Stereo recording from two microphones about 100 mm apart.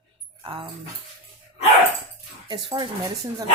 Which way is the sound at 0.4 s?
60° right (ahead or behind).